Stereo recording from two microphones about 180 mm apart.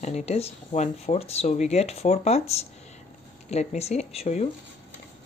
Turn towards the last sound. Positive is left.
turn(degrees=35)  # may be behind; listen again after turning